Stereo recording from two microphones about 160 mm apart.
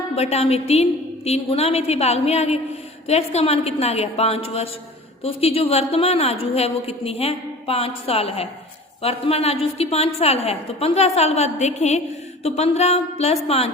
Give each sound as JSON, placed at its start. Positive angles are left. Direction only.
{"t": 0.2, "sound": "a woman's voice", "side_deg": 40}